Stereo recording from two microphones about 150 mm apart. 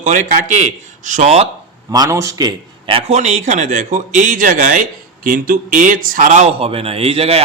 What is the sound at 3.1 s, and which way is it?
Speech, 50° right (ahead or behind).